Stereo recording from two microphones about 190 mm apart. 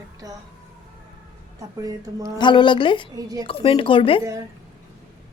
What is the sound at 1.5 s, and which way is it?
Speech, 20° right (ahead or behind).